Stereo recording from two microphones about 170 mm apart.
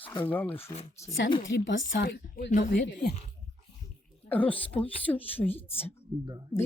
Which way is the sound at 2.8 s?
80° left.